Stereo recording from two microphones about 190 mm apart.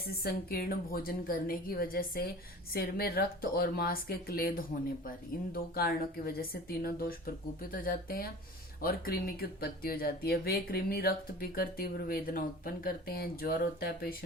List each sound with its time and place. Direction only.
0.1 s speech: 55° left (ahead or behind)